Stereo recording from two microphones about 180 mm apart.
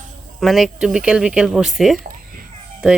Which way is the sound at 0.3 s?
Centre (ahead or behind).